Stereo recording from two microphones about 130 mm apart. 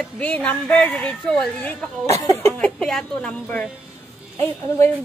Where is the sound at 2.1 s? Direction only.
20° left (ahead or behind).